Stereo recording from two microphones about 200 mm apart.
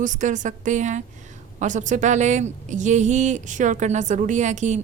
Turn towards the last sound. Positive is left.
turn(degrees=-35)  # may be behind; listen again after turning